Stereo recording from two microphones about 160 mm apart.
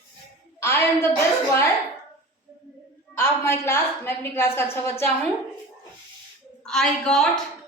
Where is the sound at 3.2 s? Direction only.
15° left (ahead or behind).